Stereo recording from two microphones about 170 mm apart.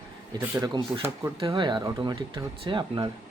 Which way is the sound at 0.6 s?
25° right (ahead or behind).